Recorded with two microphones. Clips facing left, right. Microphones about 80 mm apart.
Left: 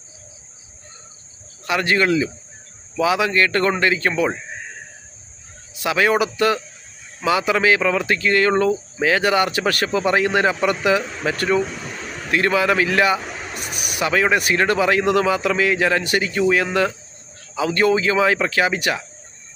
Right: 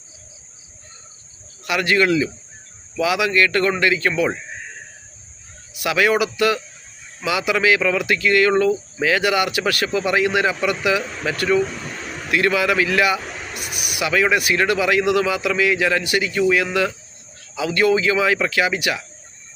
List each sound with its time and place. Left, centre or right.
1.6 s speech: left
5.7 s speech: left